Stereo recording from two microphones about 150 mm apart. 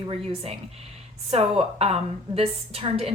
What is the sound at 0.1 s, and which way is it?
A woman's voice, 40° right (ahead or behind).